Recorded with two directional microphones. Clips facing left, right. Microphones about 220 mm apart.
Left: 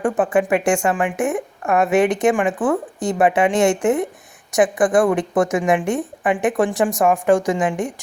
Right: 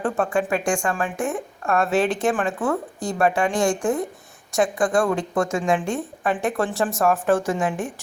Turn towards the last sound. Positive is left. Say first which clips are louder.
# left 4 dB
turn(degrees=15)  # may be behind; listen again after turning